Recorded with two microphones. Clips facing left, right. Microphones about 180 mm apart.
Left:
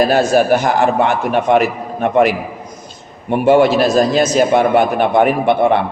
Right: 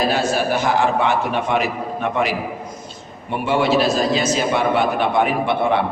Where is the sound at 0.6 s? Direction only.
50° left (ahead or behind).